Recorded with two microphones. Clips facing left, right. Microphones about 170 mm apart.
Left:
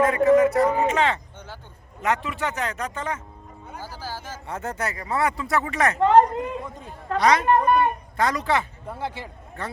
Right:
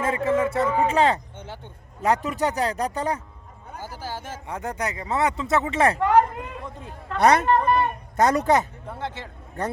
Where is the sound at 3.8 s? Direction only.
20° right (ahead or behind).